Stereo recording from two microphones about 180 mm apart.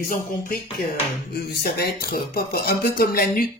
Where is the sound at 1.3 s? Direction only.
60° left (ahead or behind).